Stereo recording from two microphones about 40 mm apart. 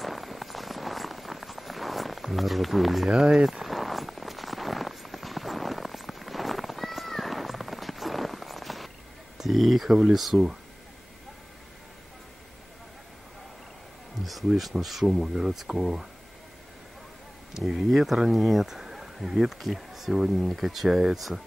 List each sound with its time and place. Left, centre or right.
0.0 s rain on surface: centre
3.1 s speech: centre
3.6 s rain on surface: centre
9.4 s speech: centre
14.2 s speech: centre
15.0 s speech: centre
17.8 s speech: centre